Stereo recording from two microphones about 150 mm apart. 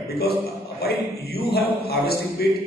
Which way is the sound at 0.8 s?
90° left.